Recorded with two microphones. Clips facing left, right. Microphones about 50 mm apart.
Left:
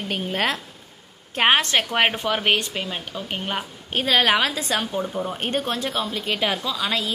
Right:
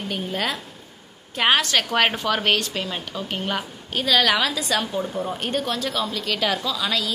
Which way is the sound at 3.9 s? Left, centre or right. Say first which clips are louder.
Left 1 dB; left.